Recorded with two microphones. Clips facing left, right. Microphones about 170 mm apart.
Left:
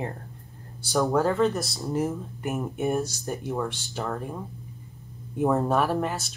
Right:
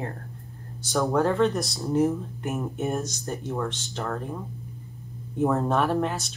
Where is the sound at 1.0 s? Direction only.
Centre (ahead or behind).